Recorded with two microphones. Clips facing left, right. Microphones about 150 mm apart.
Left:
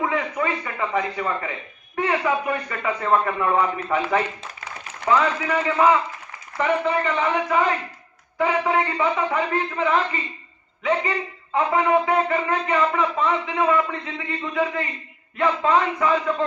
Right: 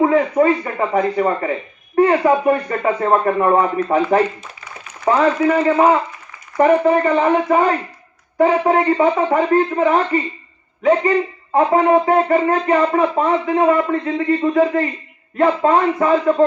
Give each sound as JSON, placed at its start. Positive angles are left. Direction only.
{"t": 0.0, "sound": "a man's voice", "side_deg": -40}
{"t": 11.5, "sound": "speech", "side_deg": -45}